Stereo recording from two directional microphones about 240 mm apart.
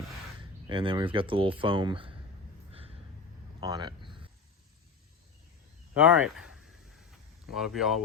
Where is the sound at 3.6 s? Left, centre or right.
Centre.